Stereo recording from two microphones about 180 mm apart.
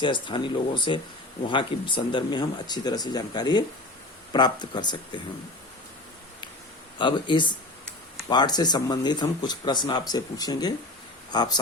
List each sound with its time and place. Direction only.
0.0 s speech: 25° left (ahead or behind)
7.0 s speech: 25° left (ahead or behind)